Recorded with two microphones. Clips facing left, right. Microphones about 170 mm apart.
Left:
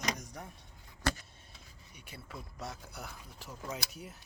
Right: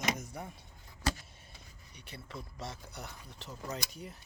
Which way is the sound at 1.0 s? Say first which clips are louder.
Left 1 dB; 60° left (ahead or behind).